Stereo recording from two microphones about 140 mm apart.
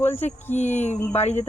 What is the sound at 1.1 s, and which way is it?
Speech, 50° left (ahead or behind).